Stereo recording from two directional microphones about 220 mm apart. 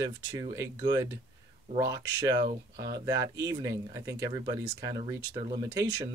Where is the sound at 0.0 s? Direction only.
15° right (ahead or behind).